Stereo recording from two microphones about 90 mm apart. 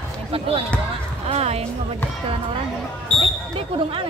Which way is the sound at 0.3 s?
90° right.